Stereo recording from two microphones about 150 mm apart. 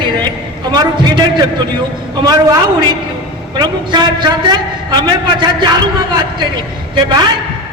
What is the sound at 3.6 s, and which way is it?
A man's voice, 30° right (ahead or behind).